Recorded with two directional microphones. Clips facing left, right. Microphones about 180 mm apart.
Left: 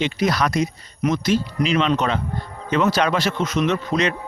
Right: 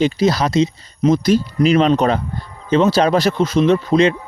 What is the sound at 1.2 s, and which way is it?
Speech, 40° right (ahead or behind).